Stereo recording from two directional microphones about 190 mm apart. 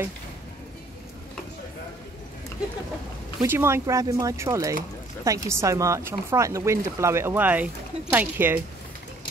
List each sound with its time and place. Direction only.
3.4 s speech: 15° right (ahead or behind)